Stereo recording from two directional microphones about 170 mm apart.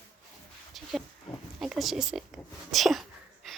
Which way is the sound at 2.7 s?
Centre (ahead or behind).